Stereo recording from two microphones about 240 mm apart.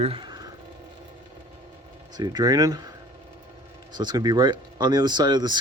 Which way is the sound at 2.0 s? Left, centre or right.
Centre.